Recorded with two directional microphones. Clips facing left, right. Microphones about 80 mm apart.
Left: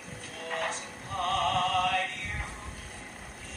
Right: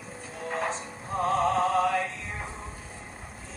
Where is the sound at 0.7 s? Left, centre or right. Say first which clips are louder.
Right 4 dB; right.